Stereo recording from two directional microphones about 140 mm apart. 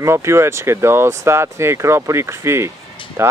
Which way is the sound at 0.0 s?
20° right (ahead or behind).